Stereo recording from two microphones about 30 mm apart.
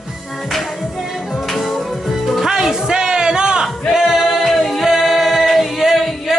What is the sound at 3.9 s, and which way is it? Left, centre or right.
Singing, centre.